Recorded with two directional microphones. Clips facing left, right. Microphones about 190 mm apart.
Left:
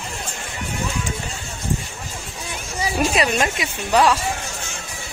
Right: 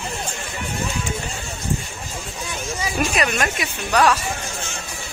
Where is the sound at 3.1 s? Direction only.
25° left (ahead or behind).